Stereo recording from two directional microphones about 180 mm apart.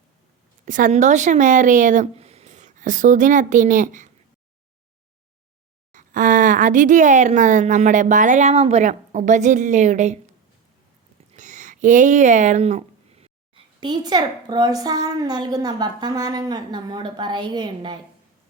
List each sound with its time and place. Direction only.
0.6 s speech: 45° right (ahead or behind)
5.9 s speech: 45° right (ahead or behind)
11.3 s a sound: 45° right (ahead or behind)
13.7 s a woman's voice: 25° right (ahead or behind)